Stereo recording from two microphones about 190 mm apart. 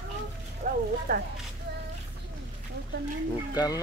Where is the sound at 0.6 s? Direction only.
45° right (ahead or behind).